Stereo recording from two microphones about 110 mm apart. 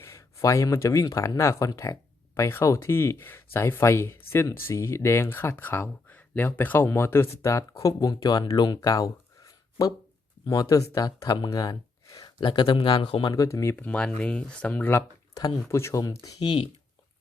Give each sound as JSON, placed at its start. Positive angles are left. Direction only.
{"t": 0.0, "sound": "speech", "side_deg": 25}
{"t": 13.3, "sound": "speech", "side_deg": 30}
{"t": 13.7, "sound": "speech", "side_deg": 10}
{"t": 15.4, "sound": "speech", "side_deg": 30}